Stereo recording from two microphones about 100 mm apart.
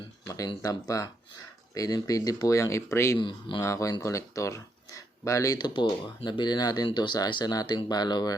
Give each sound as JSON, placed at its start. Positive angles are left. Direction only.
{"t": 0.3, "sound": "speech", "side_deg": 35}
{"t": 3.2, "sound": "speech", "side_deg": 55}
{"t": 3.6, "sound": "speech", "side_deg": 30}
{"t": 5.5, "sound": "speech", "side_deg": 45}